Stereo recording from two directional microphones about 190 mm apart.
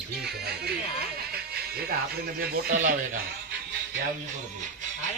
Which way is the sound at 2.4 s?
50° right (ahead or behind).